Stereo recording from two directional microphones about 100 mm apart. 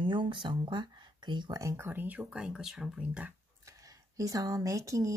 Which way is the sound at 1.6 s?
30° right (ahead or behind).